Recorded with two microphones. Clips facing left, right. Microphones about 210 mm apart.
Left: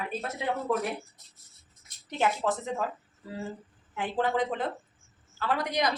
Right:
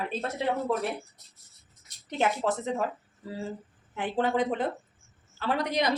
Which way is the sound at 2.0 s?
20° right (ahead or behind).